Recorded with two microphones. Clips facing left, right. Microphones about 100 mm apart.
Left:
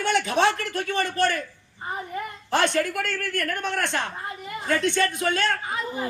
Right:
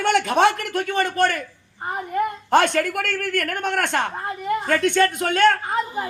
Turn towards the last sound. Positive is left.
turn(degrees=-55)  # may be behind; listen again after turning